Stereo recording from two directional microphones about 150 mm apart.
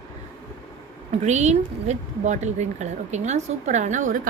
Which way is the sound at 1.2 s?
50° right (ahead or behind).